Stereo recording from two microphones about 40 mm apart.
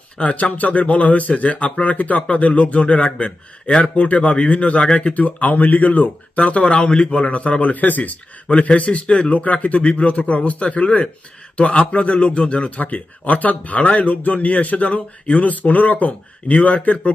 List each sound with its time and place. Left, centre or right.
0.2 s speech: left